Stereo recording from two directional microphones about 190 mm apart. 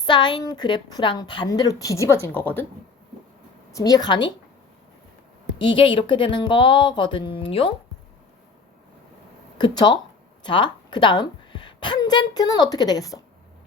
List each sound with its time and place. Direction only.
0.0 s a woman's voice: 25° left (ahead or behind)
3.7 s a woman's voice: 15° left (ahead or behind)
5.5 s a woman's voice: 25° left (ahead or behind)
9.6 s a woman's voice: 25° left (ahead or behind)